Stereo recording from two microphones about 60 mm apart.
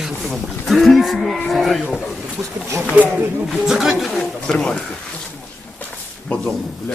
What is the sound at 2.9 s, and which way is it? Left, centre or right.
Speech, right.